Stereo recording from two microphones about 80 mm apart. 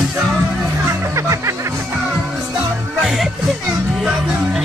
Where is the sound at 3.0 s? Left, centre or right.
Centre.